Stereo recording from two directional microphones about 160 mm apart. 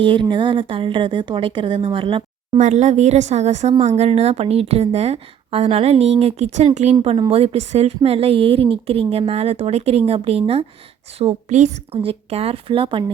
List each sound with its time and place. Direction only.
0.0 s speech: 30° right (ahead or behind)
2.6 s speech: 45° right (ahead or behind)